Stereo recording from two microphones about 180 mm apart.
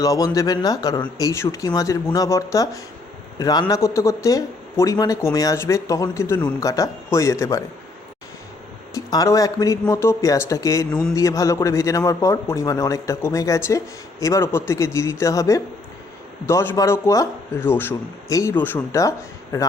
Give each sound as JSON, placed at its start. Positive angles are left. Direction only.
{"t": 0.0, "sound": "a man's voice", "side_deg": 20}
{"t": 9.0, "sound": "a man's voice", "side_deg": 20}